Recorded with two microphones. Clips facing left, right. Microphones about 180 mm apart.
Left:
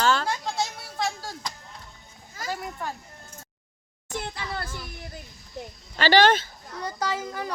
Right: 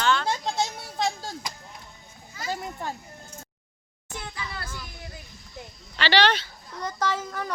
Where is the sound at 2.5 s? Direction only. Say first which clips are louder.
Even; 25° right (ahead or behind).